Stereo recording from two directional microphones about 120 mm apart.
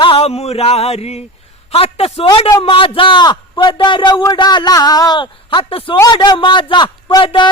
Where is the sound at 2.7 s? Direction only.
45° left (ahead or behind).